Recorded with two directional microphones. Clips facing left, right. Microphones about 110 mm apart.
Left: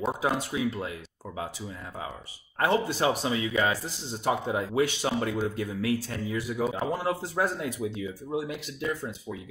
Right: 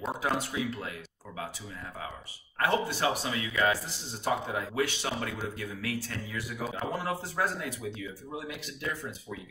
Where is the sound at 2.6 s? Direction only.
20° left (ahead or behind).